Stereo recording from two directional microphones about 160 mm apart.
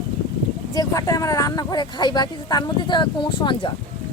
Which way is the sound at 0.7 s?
20° left (ahead or behind).